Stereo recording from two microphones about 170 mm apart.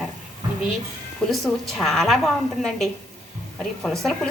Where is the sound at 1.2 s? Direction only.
Centre (ahead or behind).